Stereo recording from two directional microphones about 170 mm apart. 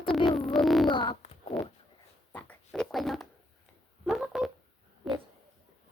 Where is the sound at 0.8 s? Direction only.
30° left (ahead or behind).